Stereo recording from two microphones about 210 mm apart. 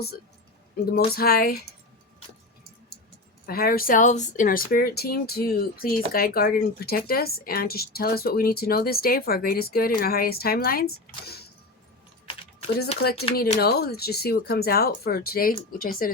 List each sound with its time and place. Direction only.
0.9 s a woman's voice: 45° left (ahead or behind)
3.4 s a woman's voice: 45° left (ahead or behind)
13.0 s a woman's voice: 45° left (ahead or behind)